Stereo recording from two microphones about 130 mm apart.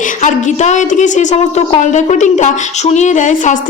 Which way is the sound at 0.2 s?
70° left (ahead or behind).